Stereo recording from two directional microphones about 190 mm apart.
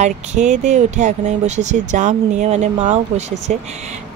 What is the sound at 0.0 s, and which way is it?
Speech, 40° right (ahead or behind).